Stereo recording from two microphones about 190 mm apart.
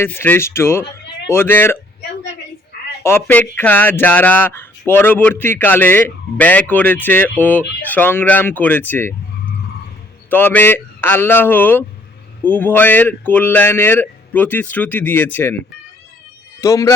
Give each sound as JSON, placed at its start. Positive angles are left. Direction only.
{"t": 0.0, "sound": "speech", "side_deg": 10}
{"t": 3.0, "sound": "speech", "side_deg": 10}
{"t": 10.2, "sound": "speech", "side_deg": 10}
{"t": 16.6, "sound": "a man's voice", "side_deg": 15}